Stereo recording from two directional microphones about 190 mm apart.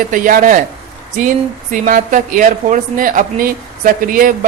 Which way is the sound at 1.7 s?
45° right (ahead or behind).